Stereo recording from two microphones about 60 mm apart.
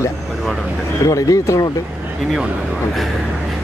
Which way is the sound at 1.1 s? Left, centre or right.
Left.